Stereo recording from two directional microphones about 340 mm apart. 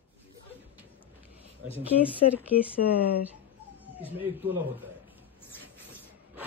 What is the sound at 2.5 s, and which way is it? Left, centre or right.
Speech, left.